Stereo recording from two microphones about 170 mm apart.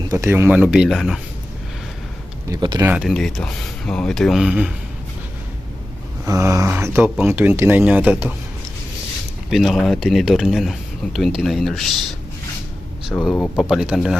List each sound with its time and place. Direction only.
0.1 s speech: 15° right (ahead or behind)
2.5 s speech: 25° right (ahead or behind)
2.8 s speech: 5° right (ahead or behind)
6.2 s speech: 20° right (ahead or behind)
9.5 s speech: centre (ahead or behind)
13.2 s speech: 10° left (ahead or behind)
13.6 s speech: 5° right (ahead or behind)